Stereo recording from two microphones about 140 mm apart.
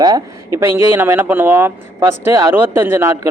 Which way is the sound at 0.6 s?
15° right (ahead or behind).